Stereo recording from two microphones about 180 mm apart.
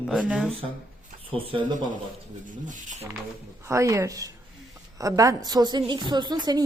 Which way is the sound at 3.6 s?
15° right (ahead or behind).